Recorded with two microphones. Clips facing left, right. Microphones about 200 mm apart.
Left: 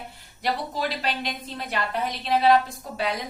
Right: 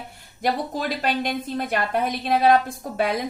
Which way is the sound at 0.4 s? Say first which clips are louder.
Right 3 dB; 50° right (ahead or behind).